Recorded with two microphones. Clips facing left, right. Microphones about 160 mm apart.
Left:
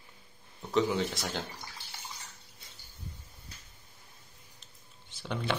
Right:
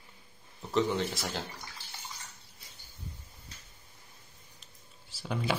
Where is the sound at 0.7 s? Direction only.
Centre (ahead or behind).